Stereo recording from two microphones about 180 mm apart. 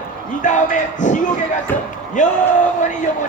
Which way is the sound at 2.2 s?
45° left (ahead or behind).